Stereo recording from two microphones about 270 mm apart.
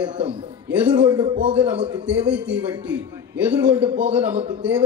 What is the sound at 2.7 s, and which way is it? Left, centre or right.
A man's voice, centre.